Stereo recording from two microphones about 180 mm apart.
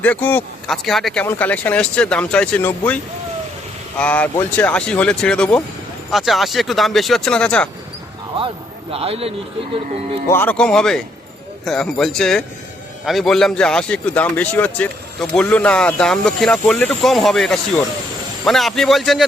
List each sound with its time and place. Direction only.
0.0 s speech: 10° left (ahead or behind)
8.9 s a man's voice: 35° right (ahead or behind)
10.2 s speech: 10° left (ahead or behind)